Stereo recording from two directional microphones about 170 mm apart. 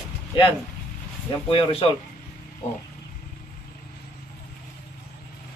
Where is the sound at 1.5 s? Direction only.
35° left (ahead or behind).